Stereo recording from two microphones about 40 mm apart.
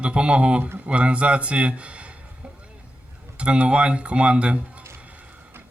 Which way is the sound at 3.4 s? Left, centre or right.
Right.